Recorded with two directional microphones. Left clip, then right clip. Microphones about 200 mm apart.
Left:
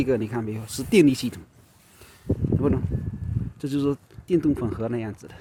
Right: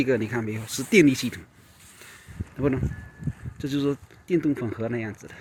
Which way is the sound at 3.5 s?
20° left (ahead or behind).